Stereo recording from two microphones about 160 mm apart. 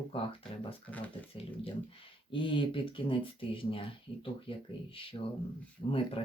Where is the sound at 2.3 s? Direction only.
30° left (ahead or behind).